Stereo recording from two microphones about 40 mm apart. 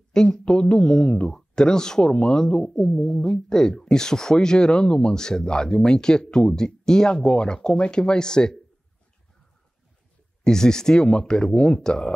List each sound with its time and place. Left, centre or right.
0.1 s speech: centre
10.4 s speech: centre